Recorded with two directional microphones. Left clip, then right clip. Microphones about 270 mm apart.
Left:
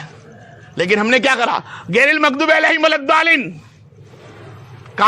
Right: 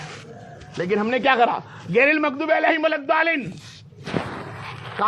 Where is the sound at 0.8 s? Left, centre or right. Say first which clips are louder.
Left 8 dB; left.